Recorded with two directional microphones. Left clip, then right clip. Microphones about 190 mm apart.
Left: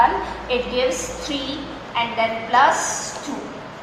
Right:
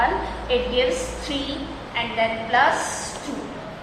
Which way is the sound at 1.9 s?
5° right (ahead or behind).